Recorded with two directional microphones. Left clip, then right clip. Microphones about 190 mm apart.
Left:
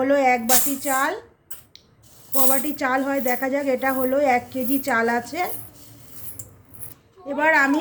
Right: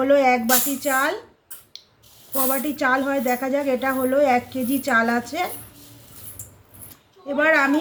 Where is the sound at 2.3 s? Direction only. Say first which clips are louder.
Even; 15° left (ahead or behind).